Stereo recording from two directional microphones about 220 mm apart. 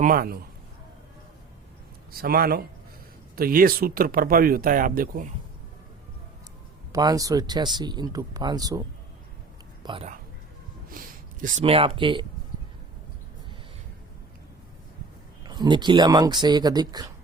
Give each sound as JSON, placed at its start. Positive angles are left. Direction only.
{"t": 0.0, "sound": "speech", "side_deg": -40}
{"t": 2.1, "sound": "speech", "side_deg": -45}
{"t": 6.9, "sound": "speech", "side_deg": -15}
{"t": 9.8, "sound": "speech", "side_deg": -25}
{"t": 10.8, "sound": "speech", "side_deg": -40}
{"t": 15.4, "sound": "speech", "side_deg": -20}